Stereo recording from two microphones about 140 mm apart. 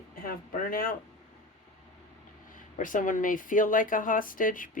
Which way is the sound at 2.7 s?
70° left (ahead or behind).